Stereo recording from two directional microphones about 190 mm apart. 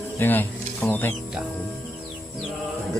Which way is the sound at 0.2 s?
10° left (ahead or behind).